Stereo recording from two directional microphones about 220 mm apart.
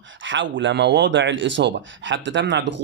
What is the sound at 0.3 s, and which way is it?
Speech, 55° right (ahead or behind).